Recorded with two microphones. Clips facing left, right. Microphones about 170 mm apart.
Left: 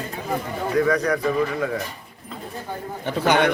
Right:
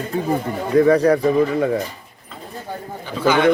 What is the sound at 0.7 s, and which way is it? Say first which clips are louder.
Speech: right 7 dB; 30° right (ahead or behind).